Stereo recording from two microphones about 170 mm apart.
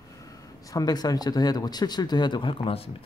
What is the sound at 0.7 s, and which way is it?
Speech, 20° left (ahead or behind).